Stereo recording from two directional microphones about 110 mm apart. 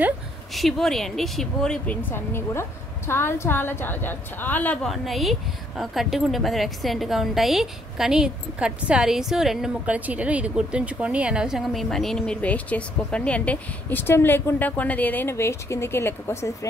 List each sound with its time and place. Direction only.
0.6 s a woman's voice: centre (ahead or behind)
4.8 s speech: centre (ahead or behind); by 16.5 s 25° left (ahead or behind)